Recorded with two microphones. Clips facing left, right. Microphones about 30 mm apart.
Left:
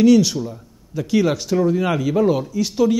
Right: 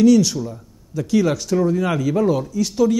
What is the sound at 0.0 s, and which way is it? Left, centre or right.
A man's voice, centre.